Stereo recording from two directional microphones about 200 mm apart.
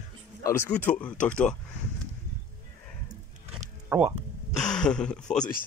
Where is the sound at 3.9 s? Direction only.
10° right (ahead or behind).